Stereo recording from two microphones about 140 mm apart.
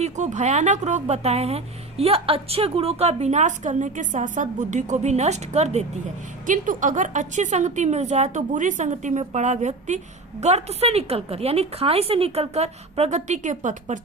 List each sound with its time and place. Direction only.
0.0 s a woman's voice: 55° right (ahead or behind)
6.4 s a woman's voice: 70° right (ahead or behind)